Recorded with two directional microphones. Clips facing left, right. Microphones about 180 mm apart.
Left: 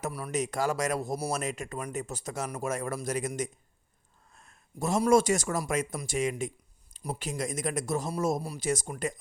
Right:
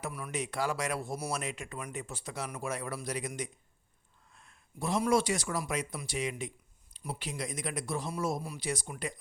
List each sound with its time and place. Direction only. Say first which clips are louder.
0.0 s speech: left 5 dB; 40° left (ahead or behind)